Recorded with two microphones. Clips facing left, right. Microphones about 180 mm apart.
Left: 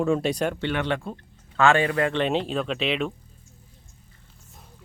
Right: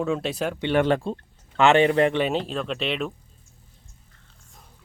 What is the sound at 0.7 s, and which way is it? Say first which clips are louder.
Speech: right 6 dB; 35° right (ahead or behind).